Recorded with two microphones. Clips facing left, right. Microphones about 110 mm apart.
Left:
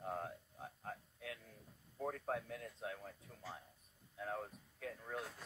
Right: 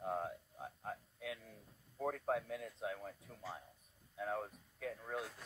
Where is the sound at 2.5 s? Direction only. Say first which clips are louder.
Right 4 dB; 5° right (ahead or behind).